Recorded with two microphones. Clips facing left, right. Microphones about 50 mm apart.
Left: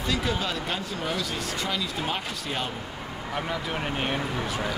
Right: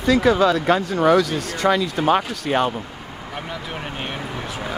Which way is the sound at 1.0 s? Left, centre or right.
Right.